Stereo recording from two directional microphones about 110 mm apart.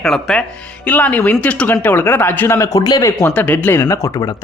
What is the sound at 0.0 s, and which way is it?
Speech, 5° left (ahead or behind).